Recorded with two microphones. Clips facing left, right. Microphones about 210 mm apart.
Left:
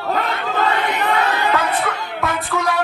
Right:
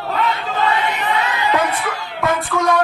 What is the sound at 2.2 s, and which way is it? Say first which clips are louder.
Music: right 4 dB; centre (ahead or behind).